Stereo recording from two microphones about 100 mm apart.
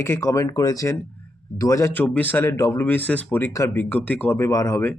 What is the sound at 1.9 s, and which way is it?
Speech, 20° left (ahead or behind).